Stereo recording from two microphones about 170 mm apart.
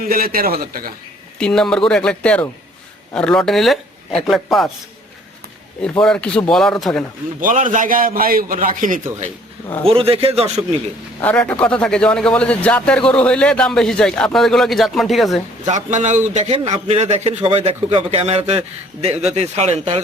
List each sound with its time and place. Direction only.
0.0 s a man's voice: 60° right (ahead or behind)
1.4 s a man's voice: 5° left (ahead or behind)
5.8 s a man's voice: 5° left (ahead or behind)
7.4 s a man's voice: 50° right (ahead or behind)
9.8 s a man's voice: 35° right (ahead or behind)
11.2 s a man's voice: 10° left (ahead or behind)
15.6 s a man's voice: 45° right (ahead or behind)